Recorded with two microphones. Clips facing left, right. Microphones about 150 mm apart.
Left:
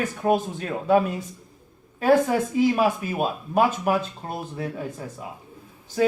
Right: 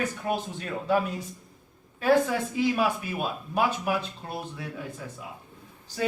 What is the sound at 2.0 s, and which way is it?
Speech, 45° left (ahead or behind).